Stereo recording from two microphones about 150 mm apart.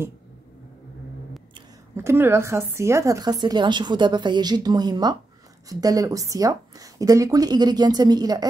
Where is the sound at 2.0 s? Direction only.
15° right (ahead or behind).